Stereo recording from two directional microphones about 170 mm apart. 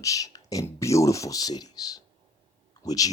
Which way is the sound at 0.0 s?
20° left (ahead or behind).